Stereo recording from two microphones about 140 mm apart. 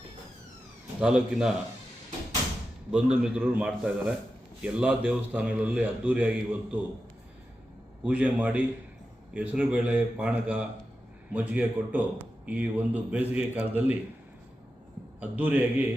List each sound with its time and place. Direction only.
1.0 s a man's voice: 5° right (ahead or behind)
2.9 s a man's voice: 5° right (ahead or behind)
8.0 s a man's voice: 10° right (ahead or behind)
15.2 s a man's voice: 10° right (ahead or behind)